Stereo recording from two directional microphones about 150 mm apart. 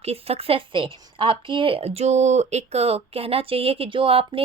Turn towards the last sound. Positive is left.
turn(degrees=-40)  # may be behind; listen again after turning